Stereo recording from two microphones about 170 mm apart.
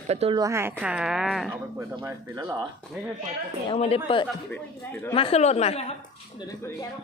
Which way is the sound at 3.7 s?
35° left (ahead or behind).